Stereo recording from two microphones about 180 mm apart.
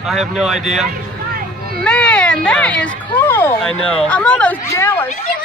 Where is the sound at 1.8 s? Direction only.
5° left (ahead or behind).